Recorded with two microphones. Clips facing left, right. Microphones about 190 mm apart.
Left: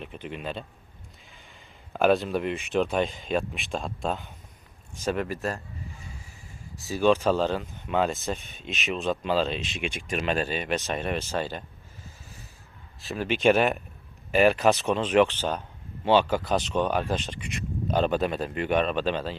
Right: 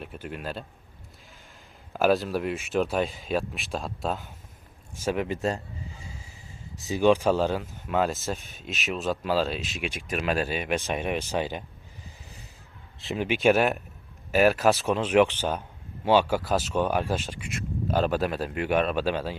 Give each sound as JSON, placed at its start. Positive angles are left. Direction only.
{"t": 0.0, "sound": "speech", "side_deg": -5}
{"t": 1.9, "sound": "speech", "side_deg": 0}
{"t": 6.8, "sound": "speech", "side_deg": -15}
{"t": 12.0, "sound": "a sound", "side_deg": -15}
{"t": 13.1, "sound": "speech", "side_deg": -15}